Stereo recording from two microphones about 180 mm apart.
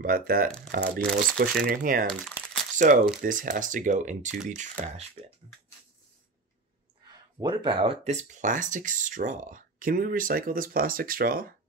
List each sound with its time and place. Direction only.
0.0 s speech: 55° right (ahead or behind)
2.0 s crumpling: 5° left (ahead or behind)
2.8 s speech: 45° right (ahead or behind)
7.3 s speech: 25° right (ahead or behind); by 11.5 s 55° right (ahead or behind)